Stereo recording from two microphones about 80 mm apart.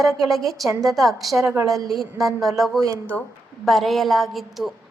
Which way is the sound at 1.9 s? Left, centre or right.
Centre.